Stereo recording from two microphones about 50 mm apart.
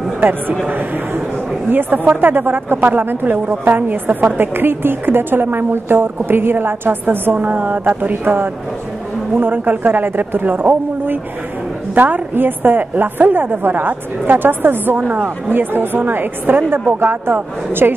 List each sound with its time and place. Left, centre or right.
0.2 s a woman's voice: right
7.3 s a woman's voice: right